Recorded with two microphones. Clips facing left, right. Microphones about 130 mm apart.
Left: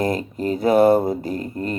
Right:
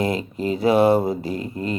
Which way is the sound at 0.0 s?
45° left (ahead or behind).